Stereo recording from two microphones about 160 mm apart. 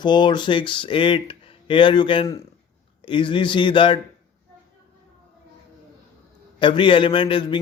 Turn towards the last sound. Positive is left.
turn(degrees=30)  # may be behind; listen again after turning